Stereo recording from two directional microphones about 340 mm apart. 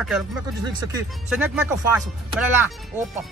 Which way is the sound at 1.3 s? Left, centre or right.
Centre.